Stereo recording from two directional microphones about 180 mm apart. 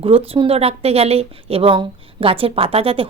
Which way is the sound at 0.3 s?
30° right (ahead or behind).